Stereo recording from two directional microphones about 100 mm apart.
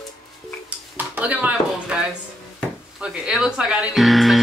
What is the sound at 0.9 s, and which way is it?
Speech, 15° right (ahead or behind).